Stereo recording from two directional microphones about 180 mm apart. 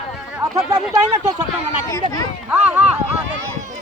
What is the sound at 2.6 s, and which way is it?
Speech, 5° right (ahead or behind).